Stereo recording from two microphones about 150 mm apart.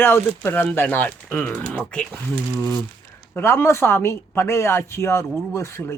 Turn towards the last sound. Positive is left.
turn(degrees=15)  # may be behind; listen again after turning